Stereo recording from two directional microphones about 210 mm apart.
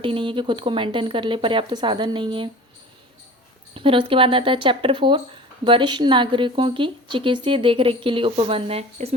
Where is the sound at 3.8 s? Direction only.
25° right (ahead or behind).